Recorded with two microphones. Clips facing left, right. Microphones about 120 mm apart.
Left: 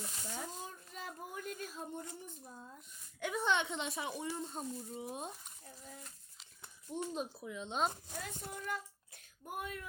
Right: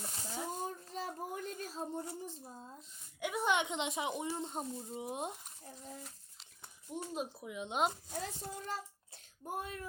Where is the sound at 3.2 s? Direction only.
10° right (ahead or behind).